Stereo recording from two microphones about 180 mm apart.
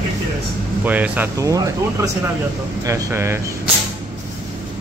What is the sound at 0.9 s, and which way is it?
Speech, 10° right (ahead or behind).